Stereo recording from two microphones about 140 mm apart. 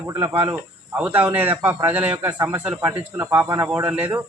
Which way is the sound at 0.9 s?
10° right (ahead or behind).